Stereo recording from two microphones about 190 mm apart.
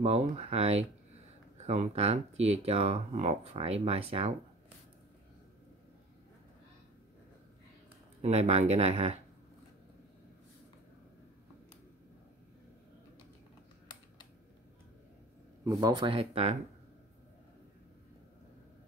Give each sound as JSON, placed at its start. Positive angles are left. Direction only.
{"t": 0.0, "sound": "speech", "side_deg": -35}
{"t": 8.2, "sound": "speech", "side_deg": -35}
{"t": 15.6, "sound": "speech", "side_deg": -15}